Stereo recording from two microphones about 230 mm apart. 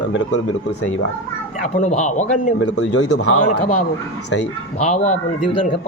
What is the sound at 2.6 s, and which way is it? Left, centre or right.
Speech, left.